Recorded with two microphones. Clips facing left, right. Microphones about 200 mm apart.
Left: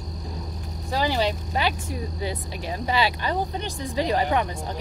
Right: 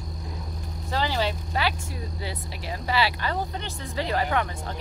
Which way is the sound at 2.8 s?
20° left (ahead or behind).